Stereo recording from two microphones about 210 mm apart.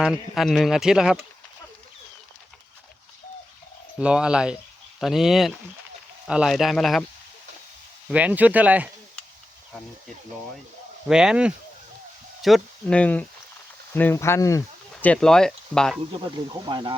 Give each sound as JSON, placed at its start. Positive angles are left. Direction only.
{"t": 0.0, "sound": "speech", "side_deg": 0}
{"t": 4.0, "sound": "speech", "side_deg": -5}
{"t": 8.1, "sound": "speech", "side_deg": -5}
{"t": 11.1, "sound": "speech", "side_deg": -5}
{"t": 16.5, "sound": "speech", "side_deg": -20}